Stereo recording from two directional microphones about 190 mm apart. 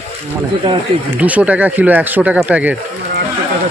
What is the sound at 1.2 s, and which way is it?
Speech, 5° right (ahead or behind).